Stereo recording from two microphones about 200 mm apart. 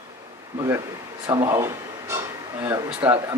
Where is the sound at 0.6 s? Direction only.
15° right (ahead or behind).